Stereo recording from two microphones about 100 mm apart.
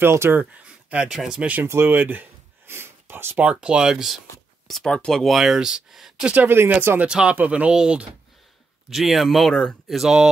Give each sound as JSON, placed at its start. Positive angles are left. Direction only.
{"t": 0.0, "sound": "speech", "side_deg": -25}
{"t": 4.6, "sound": "speech", "side_deg": 5}
{"t": 6.3, "sound": "speech", "side_deg": -20}